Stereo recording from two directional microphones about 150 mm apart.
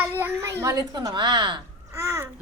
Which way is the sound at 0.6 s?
25° right (ahead or behind).